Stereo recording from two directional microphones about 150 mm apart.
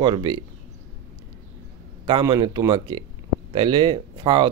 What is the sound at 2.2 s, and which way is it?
Speech, 30° right (ahead or behind).